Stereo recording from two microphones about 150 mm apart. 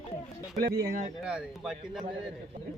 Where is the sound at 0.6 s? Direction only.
90° right.